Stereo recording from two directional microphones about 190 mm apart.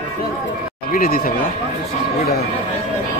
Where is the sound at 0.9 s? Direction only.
50° left (ahead or behind).